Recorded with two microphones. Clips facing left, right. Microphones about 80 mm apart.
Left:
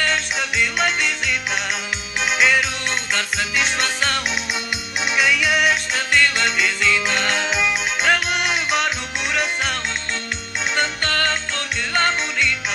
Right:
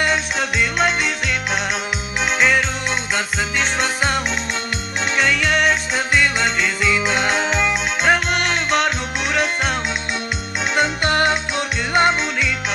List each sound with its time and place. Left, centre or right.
0.4 s music: centre
5.9 s music: centre
11.1 s music: centre